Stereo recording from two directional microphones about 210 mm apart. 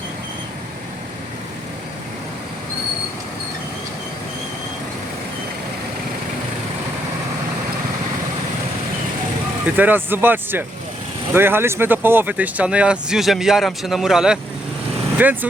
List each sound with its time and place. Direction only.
9.7 s speech: 10° right (ahead or behind)